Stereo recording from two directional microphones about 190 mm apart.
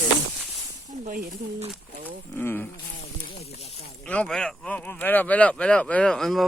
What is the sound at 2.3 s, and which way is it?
Speech, 10° left (ahead or behind).